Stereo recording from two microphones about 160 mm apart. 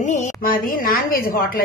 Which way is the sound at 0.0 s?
50° left (ahead or behind).